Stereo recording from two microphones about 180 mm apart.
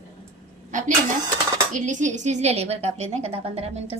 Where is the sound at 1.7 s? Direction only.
45° right (ahead or behind).